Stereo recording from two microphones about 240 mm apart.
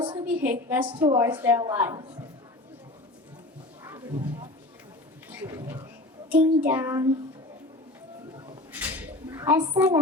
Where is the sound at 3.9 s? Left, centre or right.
Centre.